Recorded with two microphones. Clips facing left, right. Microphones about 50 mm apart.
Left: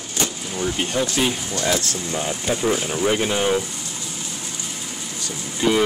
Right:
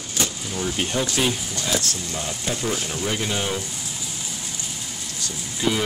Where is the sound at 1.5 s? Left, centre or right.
Left.